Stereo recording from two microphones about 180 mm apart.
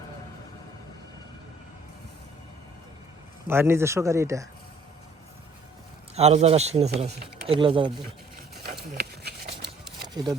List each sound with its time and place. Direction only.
3.4 s a man's voice: 15° right (ahead or behind)
6.1 s speech: 40° right (ahead or behind)
9.0 s a sound: 60° right (ahead or behind)